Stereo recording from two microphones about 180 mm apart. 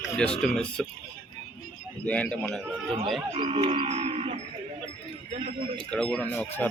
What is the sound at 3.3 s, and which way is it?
Music, 35° right (ahead or behind).